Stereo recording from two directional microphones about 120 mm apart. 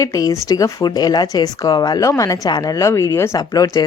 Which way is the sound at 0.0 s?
25° left (ahead or behind).